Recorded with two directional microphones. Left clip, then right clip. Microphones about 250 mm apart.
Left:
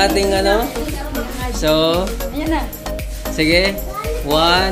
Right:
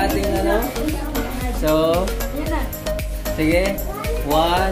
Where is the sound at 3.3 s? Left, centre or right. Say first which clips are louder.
Left 4 dB; centre.